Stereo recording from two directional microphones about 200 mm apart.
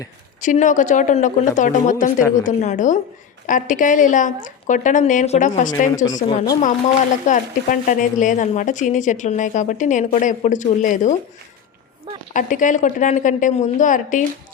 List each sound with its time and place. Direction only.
0.4 s speech: 40° left (ahead or behind)
6.2 s speech: 20° left (ahead or behind)
7.3 s speech: 40° left (ahead or behind)
12.3 s speech: 40° left (ahead or behind)